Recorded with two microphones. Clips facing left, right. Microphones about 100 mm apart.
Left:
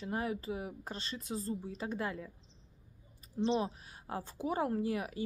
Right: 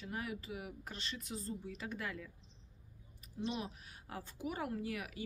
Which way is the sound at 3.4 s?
30° left (ahead or behind).